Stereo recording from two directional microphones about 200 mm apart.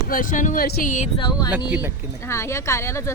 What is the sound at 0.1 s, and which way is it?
Speech, 40° left (ahead or behind).